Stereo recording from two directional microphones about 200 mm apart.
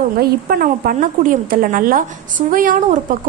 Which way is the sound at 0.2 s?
50° right (ahead or behind).